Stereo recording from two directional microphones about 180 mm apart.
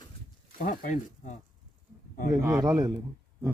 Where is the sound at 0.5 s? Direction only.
50° left (ahead or behind).